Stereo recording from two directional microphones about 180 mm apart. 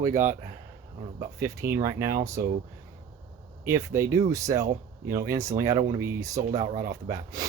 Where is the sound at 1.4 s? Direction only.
15° right (ahead or behind).